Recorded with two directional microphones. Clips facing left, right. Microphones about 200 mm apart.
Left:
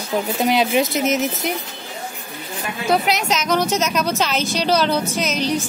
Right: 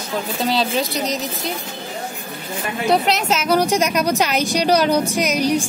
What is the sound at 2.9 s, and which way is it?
A woman's voice, centre (ahead or behind).